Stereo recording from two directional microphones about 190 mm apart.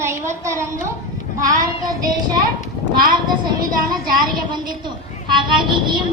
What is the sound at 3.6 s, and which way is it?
Speech, 50° right (ahead or behind).